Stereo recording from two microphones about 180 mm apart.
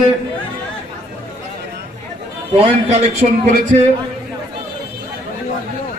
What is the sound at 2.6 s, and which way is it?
Speech, 35° right (ahead or behind).